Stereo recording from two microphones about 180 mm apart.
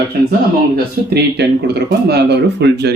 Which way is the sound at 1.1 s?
65° right (ahead or behind).